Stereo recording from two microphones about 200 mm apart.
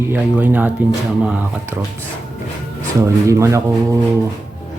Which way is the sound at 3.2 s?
15° right (ahead or behind).